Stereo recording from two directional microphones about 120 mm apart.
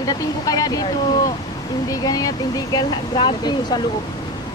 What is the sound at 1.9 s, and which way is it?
Speech, 30° left (ahead or behind).